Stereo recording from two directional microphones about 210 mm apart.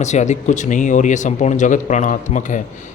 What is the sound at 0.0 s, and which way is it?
A man's voice, 35° left (ahead or behind).